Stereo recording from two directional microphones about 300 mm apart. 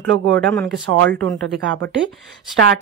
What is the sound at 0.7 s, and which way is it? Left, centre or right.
Speech, right.